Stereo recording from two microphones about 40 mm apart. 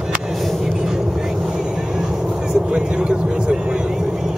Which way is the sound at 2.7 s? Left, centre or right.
Right.